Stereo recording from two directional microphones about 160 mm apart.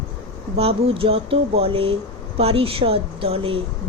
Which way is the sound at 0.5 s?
35° right (ahead or behind).